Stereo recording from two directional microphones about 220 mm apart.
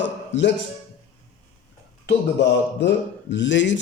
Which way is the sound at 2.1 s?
50° left (ahead or behind).